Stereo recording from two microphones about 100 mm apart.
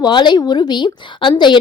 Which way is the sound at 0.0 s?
50° left (ahead or behind).